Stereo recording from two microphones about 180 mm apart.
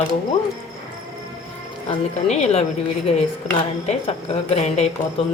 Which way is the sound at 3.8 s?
35° left (ahead or behind).